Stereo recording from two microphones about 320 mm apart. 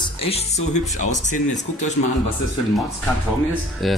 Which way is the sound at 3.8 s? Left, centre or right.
Centre.